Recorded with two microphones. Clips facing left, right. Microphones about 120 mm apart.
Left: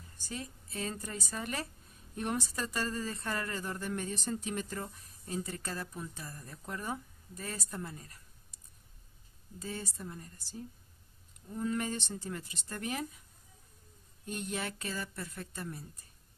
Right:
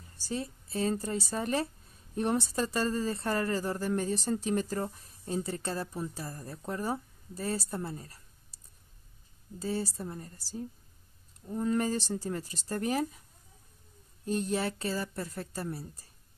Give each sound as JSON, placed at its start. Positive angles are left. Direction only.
{"t": 0.2, "sound": "speech", "side_deg": -30}
{"t": 9.6, "sound": "speech", "side_deg": -35}
{"t": 14.2, "sound": "speech", "side_deg": -35}